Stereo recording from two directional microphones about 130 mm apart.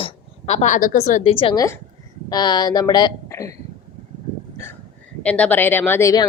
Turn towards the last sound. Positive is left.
turn(degrees=25)  # may be behind; listen again after turning